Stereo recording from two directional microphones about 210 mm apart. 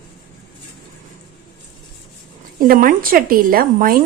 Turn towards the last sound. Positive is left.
turn(degrees=-45)  # may be behind; listen again after turning